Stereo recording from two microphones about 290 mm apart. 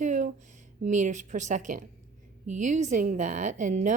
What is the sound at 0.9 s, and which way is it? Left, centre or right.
Speech, right.